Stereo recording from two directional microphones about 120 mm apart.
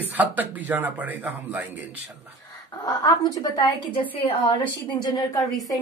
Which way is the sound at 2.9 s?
35° left (ahead or behind).